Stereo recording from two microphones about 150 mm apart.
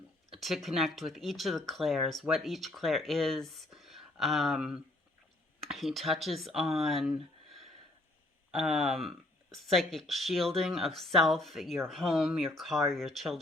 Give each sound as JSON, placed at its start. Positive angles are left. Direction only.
{"t": 0.3, "sound": "speech", "side_deg": 0}
{"t": 8.5, "sound": "speech", "side_deg": 0}